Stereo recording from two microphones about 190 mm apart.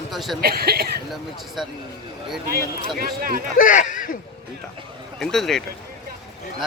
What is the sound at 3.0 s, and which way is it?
Speech, 50° right (ahead or behind).